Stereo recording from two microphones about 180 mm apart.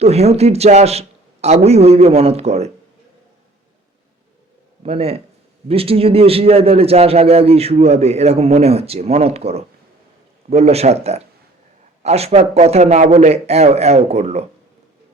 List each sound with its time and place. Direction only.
0.0 s a man's voice: 35° right (ahead or behind)
4.8 s a man's voice: 35° right (ahead or behind)